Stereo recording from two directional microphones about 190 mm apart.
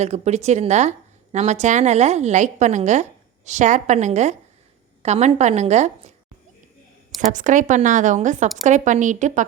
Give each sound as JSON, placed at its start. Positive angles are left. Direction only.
{"t": 0.0, "sound": "a woman's voice", "side_deg": -35}
{"t": 7.2, "sound": "a woman's voice", "side_deg": -40}